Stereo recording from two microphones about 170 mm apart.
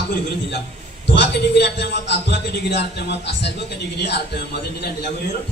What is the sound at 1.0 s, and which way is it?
A man's voice, 90° left.